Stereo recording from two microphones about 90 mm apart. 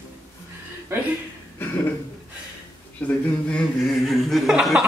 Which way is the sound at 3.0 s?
15° left (ahead or behind).